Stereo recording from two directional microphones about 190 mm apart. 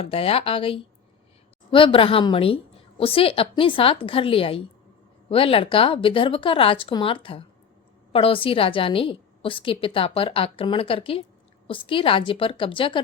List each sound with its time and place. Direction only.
0.0 s a woman's voice: 30° left (ahead or behind)